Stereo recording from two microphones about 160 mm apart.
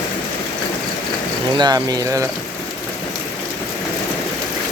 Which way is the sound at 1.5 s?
25° right (ahead or behind).